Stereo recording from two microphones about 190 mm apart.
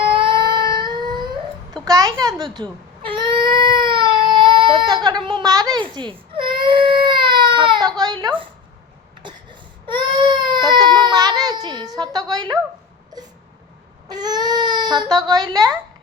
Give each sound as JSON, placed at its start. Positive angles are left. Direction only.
{"t": 0.1, "sound": "crying", "side_deg": -25}
{"t": 2.2, "sound": "speech", "side_deg": -20}
{"t": 3.5, "sound": "baby cry", "side_deg": -25}
{"t": 4.4, "sound": "a sound", "side_deg": -25}
{"t": 9.2, "sound": "baby cry", "side_deg": -25}
{"t": 11.9, "sound": "a woman's voice", "side_deg": -20}
{"t": 14.1, "sound": "speech", "side_deg": -20}